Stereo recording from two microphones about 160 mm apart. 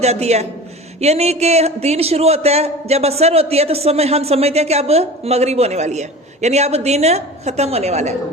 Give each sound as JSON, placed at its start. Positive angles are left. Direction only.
{"t": 0.0, "sound": "a man's voice", "side_deg": -45}